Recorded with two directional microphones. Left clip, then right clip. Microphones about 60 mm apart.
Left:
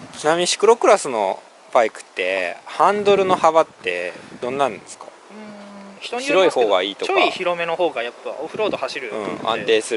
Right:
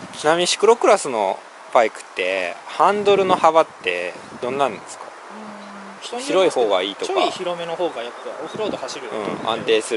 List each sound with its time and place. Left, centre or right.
0.2 s speech: centre
6.1 s speech: centre
7.0 s speech: left
9.1 s speech: centre